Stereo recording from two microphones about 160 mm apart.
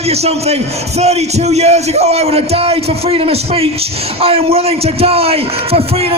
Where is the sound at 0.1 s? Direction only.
40° right (ahead or behind).